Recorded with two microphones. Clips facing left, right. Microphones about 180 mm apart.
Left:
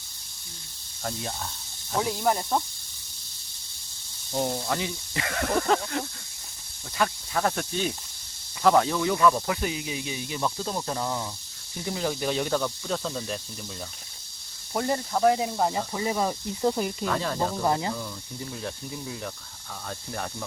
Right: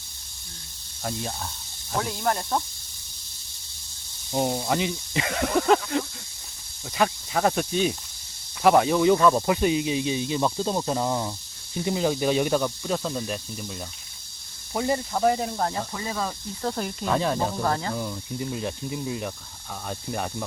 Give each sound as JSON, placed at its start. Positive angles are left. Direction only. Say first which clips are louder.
{"t": 1.0, "sound": "speech", "louder": "right 2 dB", "side_deg": -5}
{"t": 4.3, "sound": "speech", "louder": "right 3 dB", "side_deg": -15}
{"t": 9.1, "sound": "speech", "louder": "right 3 dB", "side_deg": -30}
{"t": 14.7, "sound": "speech", "louder": "right 1 dB", "side_deg": 0}
{"t": 17.1, "sound": "speech", "louder": "right 7 dB", "side_deg": -15}
{"t": 17.6, "sound": "speech", "louder": "left 1 dB", "side_deg": 15}
{"t": 17.9, "sound": "speech", "louder": "right 5 dB", "side_deg": -15}